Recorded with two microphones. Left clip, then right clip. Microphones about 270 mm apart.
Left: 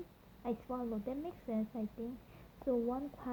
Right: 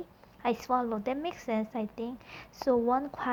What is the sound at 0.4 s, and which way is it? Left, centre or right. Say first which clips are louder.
A woman's voice: right 12 dB; right.